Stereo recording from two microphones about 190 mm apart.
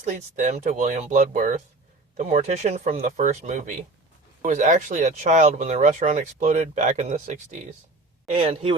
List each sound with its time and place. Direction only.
0.0 s speech: 40° right (ahead or behind)
8.3 s speech: 30° right (ahead or behind)